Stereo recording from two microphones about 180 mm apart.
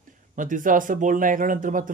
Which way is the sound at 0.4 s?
45° right (ahead or behind).